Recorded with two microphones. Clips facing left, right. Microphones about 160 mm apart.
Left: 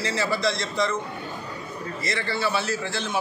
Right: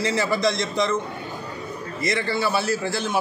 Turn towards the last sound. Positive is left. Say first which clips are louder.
# right 4 dB
turn(degrees=-10)  # may be behind; listen again after turning